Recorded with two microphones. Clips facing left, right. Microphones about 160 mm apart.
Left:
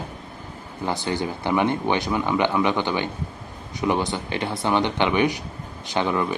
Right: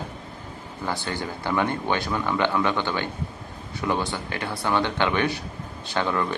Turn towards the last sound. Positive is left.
turn(degrees=15)  # may be behind; listen again after turning